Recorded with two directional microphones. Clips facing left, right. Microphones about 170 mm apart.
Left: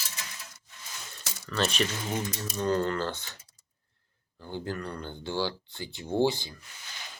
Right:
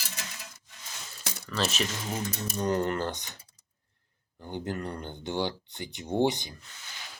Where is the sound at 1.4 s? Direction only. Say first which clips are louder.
Left 2 dB; centre (ahead or behind).